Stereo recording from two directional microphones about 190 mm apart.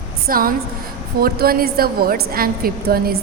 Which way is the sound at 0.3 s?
50° right (ahead or behind).